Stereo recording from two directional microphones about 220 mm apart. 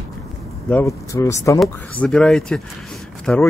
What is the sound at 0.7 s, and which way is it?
Speech, 10° left (ahead or behind).